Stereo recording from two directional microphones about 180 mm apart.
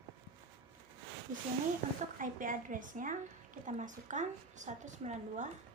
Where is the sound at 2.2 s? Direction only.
50° right (ahead or behind).